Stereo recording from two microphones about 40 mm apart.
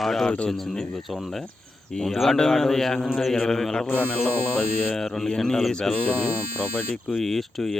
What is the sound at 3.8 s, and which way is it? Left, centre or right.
Speech, left.